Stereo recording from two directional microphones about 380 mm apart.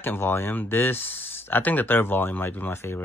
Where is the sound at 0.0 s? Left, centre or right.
Centre.